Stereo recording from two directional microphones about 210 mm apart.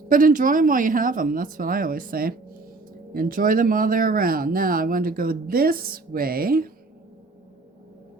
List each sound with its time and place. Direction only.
0.1 s speech: 40° right (ahead or behind)